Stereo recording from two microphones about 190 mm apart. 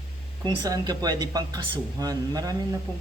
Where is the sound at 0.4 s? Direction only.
20° right (ahead or behind).